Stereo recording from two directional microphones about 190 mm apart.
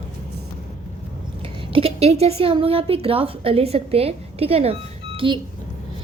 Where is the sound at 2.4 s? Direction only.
30° right (ahead or behind).